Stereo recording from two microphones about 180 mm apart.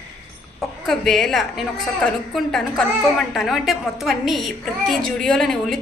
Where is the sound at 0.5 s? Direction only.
Centre (ahead or behind).